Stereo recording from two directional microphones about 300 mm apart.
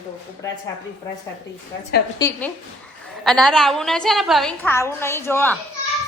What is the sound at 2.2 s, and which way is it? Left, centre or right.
A woman's voice, centre.